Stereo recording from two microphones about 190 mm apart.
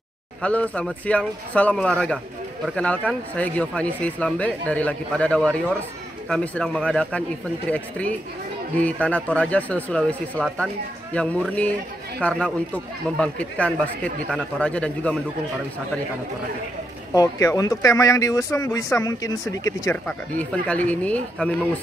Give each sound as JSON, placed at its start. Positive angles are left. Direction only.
{"t": 0.4, "sound": "speech", "side_deg": 5}
{"t": 17.1, "sound": "speech", "side_deg": 15}